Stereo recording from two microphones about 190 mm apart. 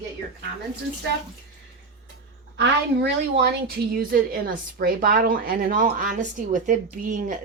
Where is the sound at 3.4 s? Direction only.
55° right (ahead or behind).